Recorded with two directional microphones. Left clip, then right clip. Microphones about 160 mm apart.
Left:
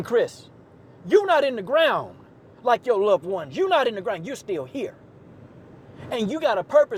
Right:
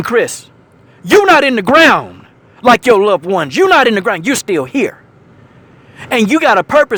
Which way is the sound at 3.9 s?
45° right (ahead or behind).